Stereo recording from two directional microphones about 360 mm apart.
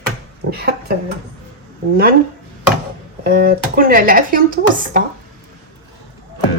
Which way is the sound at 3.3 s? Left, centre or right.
Right.